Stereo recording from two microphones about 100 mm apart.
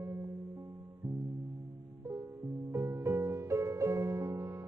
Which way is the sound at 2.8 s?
25° right (ahead or behind).